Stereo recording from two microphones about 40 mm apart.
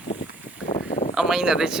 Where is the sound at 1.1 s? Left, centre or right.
Centre.